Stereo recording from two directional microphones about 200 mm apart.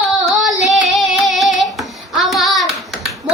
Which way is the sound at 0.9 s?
Centre (ahead or behind).